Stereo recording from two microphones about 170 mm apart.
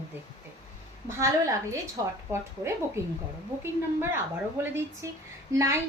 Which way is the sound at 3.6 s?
15° right (ahead or behind).